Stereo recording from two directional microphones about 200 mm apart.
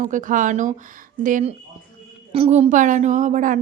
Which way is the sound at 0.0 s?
40° right (ahead or behind).